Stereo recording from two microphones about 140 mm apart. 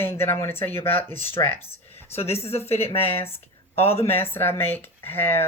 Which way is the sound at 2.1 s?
45° left (ahead or behind).